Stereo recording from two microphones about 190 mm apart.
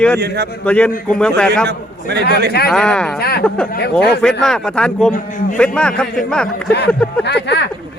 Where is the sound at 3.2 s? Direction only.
55° left (ahead or behind).